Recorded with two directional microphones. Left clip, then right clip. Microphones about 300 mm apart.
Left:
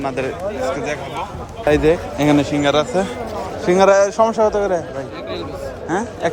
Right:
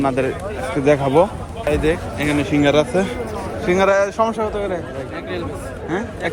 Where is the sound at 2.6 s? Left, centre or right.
Centre.